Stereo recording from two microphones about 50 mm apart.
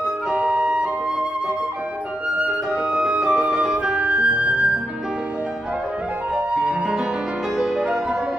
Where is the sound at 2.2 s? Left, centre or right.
Right.